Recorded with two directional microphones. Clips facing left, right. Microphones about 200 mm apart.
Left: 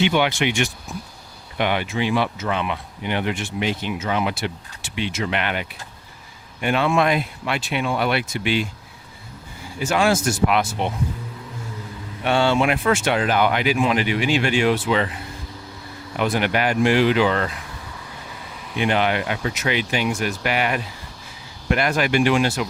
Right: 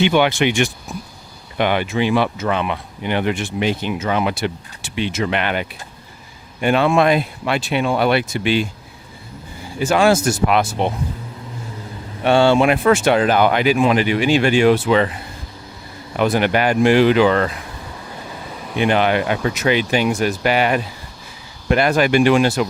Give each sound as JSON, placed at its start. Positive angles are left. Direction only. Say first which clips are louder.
{"t": 0.1, "sound": "speech", "louder": "right 4 dB", "side_deg": -50}
{"t": 9.8, "sound": "speech", "louder": "right 5 dB", "side_deg": -35}
{"t": 12.2, "sound": "speech", "louder": "right 5 dB", "side_deg": -30}
{"t": 16.1, "sound": "speech", "louder": "right 4 dB", "side_deg": -40}
{"t": 18.8, "sound": "speech", "louder": "right 4 dB", "side_deg": -45}